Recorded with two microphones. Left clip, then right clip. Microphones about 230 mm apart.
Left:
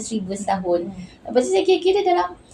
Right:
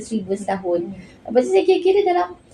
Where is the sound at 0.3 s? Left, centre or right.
Centre.